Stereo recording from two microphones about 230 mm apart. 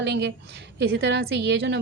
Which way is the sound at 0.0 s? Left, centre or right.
Right.